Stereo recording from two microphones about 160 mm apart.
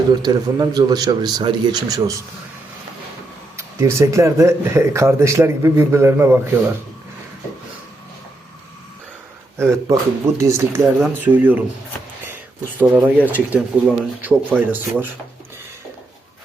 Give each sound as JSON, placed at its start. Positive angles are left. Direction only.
{"t": 0.1, "sound": "speech", "side_deg": -25}
{"t": 3.6, "sound": "speech", "side_deg": -15}
{"t": 9.6, "sound": "speech", "side_deg": -20}
{"t": 12.9, "sound": "speech", "side_deg": -10}